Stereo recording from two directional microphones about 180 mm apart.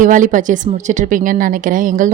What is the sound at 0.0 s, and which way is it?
A woman's voice, 45° right (ahead or behind).